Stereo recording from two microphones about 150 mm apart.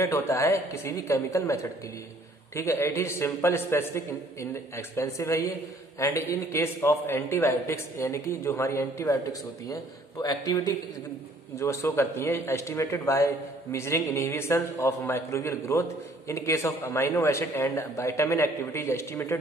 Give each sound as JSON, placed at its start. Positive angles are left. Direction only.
{"t": 0.0, "sound": "a man's voice", "side_deg": 20}